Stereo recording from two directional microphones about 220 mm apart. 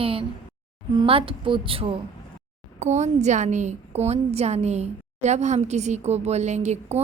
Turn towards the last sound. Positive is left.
turn(degrees=-30)  # may be behind; listen again after turning